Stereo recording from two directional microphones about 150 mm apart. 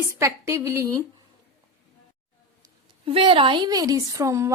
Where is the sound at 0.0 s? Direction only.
20° right (ahead or behind).